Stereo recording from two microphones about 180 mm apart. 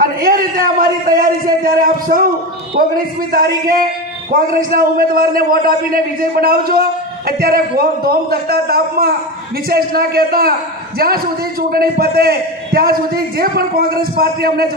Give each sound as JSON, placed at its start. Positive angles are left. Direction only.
{"t": 0.0, "sound": "a man's voice", "side_deg": -55}